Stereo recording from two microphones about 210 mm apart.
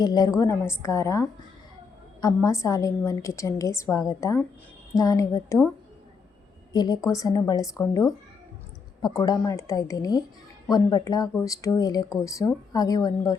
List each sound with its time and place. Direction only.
0.0 s a woman's voice: 20° left (ahead or behind)
6.7 s a woman's voice: 20° left (ahead or behind)